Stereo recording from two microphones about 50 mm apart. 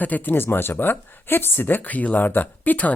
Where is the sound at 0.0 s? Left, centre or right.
Left.